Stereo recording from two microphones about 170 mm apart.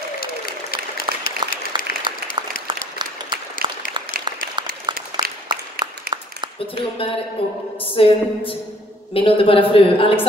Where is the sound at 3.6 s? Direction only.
30° right (ahead or behind).